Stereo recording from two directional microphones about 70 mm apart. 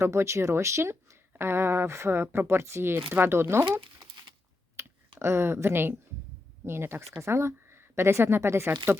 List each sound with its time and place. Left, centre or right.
0.0 s speech: right
4.0 s a sound: right
4.8 s speech: right